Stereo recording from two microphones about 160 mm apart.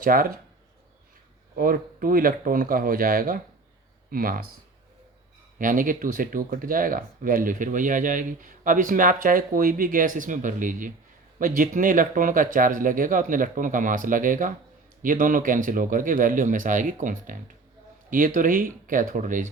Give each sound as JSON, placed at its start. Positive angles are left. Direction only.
{"t": 0.0, "sound": "speech", "side_deg": -60}
{"t": 1.5, "sound": "speech", "side_deg": -60}
{"t": 5.5, "sound": "speech", "side_deg": -55}